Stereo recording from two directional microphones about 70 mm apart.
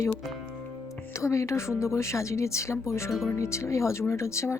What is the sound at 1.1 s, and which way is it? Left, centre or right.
Speech, left.